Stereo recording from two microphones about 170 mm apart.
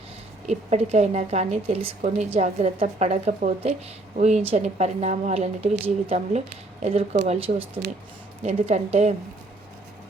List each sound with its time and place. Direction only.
0.4 s a woman's voice: 40° right (ahead or behind)